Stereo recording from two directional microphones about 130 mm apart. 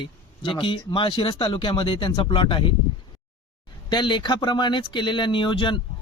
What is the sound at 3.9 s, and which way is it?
Speech, 35° left (ahead or behind).